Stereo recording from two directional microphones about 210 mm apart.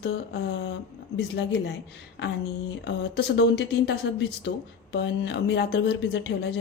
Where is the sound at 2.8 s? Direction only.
55° left (ahead or behind).